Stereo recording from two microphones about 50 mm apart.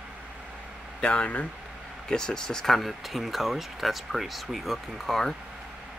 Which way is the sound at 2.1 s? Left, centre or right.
Centre.